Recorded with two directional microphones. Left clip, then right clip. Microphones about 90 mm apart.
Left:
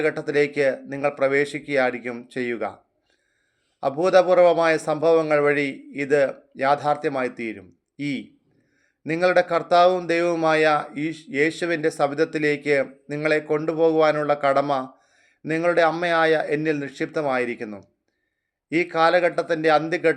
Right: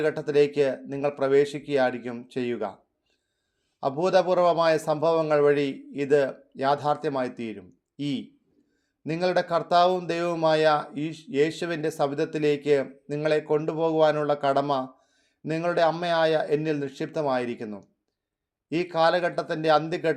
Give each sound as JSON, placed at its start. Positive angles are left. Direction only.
{"t": 0.0, "sound": "a man's voice", "side_deg": -45}
{"t": 3.8, "sound": "a man's voice", "side_deg": -40}